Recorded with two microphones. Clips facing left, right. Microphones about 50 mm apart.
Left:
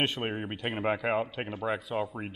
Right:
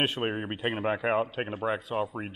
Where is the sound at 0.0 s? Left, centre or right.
Centre.